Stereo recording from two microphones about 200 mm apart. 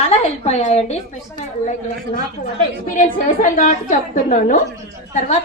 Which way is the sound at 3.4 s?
40° left (ahead or behind).